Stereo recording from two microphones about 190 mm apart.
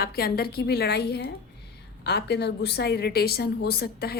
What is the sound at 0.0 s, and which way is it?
A woman's voice, 55° left (ahead or behind).